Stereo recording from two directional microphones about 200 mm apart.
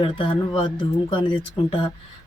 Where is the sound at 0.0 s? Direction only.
25° left (ahead or behind).